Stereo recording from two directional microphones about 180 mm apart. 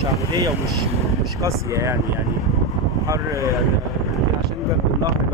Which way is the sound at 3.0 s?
20° right (ahead or behind).